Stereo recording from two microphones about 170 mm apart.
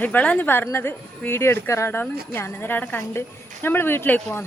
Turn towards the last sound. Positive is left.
turn(degrees=10)  # may be behind; listen again after turning